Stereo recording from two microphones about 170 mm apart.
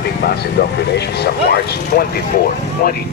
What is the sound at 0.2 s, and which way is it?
A man's voice, 65° left (ahead or behind).